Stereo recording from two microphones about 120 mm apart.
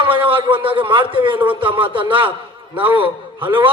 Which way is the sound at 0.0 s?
45° right (ahead or behind).